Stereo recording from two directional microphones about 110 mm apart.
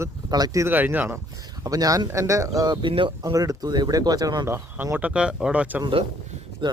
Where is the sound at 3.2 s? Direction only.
30° right (ahead or behind).